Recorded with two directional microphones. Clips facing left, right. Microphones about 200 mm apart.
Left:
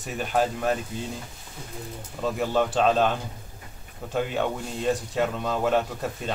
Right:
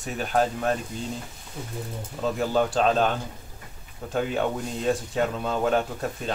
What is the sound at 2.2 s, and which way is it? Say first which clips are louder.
Speech: right 1 dB; centre (ahead or behind).